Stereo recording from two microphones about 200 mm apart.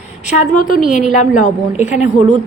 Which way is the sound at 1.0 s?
40° left (ahead or behind).